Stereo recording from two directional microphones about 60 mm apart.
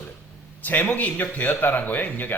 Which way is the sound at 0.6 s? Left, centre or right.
Left.